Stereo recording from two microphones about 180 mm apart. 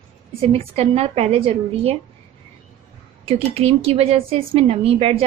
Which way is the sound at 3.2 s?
35° right (ahead or behind).